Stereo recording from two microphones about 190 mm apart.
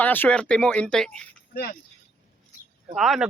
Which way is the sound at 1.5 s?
50° left (ahead or behind).